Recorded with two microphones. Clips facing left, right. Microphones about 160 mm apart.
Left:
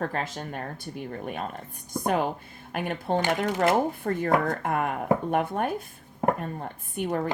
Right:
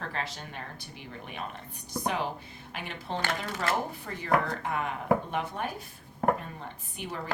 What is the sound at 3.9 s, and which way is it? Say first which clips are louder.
A woman's voice: left 4 dB; 50° left (ahead or behind).